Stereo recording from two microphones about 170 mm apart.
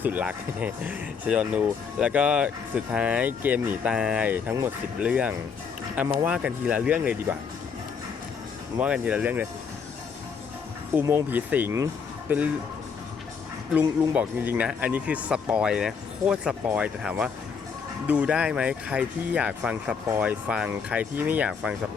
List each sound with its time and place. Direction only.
0.0 s speech: 10° right (ahead or behind)
8.8 s speech: 10° right (ahead or behind)
10.9 s speech: 10° right (ahead or behind)
13.7 s speech: 10° right (ahead or behind)